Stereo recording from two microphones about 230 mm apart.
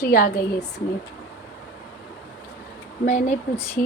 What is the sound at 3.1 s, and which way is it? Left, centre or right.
Speech, left.